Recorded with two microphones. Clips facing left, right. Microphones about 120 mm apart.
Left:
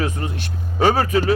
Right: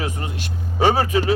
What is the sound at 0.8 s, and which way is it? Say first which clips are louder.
Speech: even; 25° right (ahead or behind).